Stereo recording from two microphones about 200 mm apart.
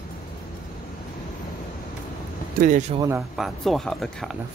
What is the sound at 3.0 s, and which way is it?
Speech, 15° right (ahead or behind).